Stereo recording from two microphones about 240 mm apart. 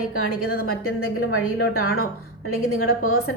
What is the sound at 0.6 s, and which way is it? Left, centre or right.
A woman's voice, left.